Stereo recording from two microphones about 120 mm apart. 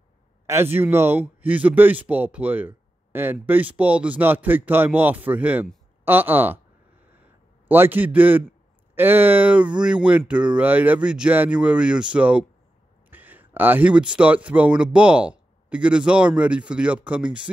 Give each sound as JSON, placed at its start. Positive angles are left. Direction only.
{"t": 0.5, "sound": "speech", "side_deg": -20}
{"t": 7.6, "sound": "speech", "side_deg": -15}